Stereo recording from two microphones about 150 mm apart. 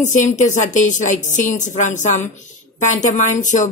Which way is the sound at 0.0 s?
55° left (ahead or behind).